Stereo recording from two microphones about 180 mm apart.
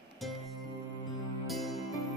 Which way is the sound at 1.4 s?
Centre (ahead or behind).